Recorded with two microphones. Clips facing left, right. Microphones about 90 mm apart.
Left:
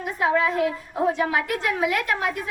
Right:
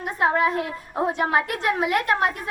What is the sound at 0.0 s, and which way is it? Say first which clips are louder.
A woman's voice: right 1 dB; 35° right (ahead or behind).